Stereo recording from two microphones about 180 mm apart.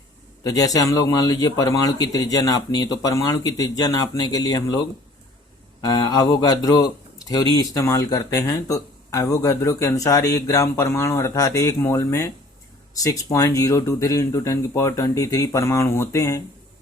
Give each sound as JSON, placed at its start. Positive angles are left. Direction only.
{"t": 0.4, "sound": "speech", "side_deg": 20}
{"t": 5.8, "sound": "speech", "side_deg": 20}